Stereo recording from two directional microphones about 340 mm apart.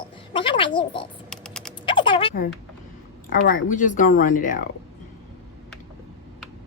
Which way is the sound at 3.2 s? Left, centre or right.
Left.